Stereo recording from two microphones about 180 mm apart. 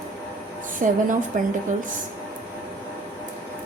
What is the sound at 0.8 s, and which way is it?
Speech, 45° right (ahead or behind).